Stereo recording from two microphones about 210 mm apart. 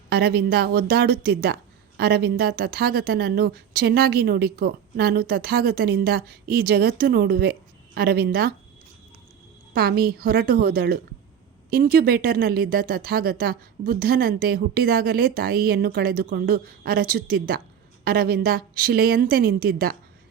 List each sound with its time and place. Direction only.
0.1 s speech: 50° right (ahead or behind)
9.7 s speech: 45° right (ahead or behind)